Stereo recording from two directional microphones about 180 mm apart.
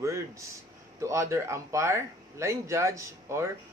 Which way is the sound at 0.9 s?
15° right (ahead or behind).